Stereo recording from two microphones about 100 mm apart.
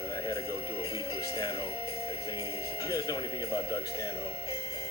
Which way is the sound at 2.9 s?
35° left (ahead or behind).